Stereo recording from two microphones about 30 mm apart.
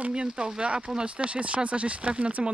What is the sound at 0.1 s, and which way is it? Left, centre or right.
Speech, right.